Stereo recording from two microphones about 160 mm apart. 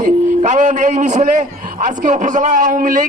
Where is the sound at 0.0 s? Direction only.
50° right (ahead or behind).